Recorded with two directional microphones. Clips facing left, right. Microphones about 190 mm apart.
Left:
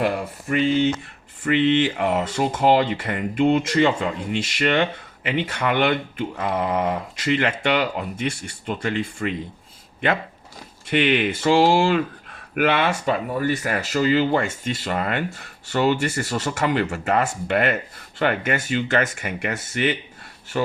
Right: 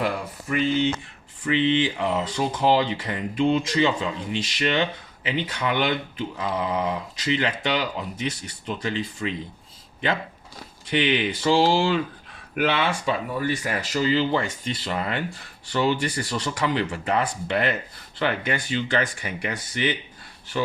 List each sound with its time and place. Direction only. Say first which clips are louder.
0.0 s speech: left 4 dB; 50° left (ahead or behind)
10.8 s speech: left 3 dB; 55° left (ahead or behind)